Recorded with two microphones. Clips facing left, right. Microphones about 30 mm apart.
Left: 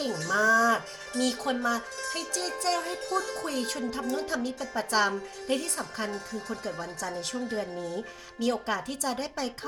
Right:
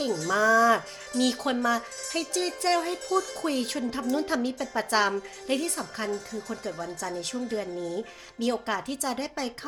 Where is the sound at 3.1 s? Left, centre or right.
Centre.